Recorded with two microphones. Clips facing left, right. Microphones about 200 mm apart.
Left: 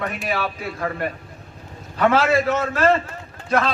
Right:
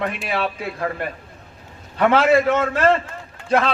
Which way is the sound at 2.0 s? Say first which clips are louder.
Right 2 dB; 30° right (ahead or behind).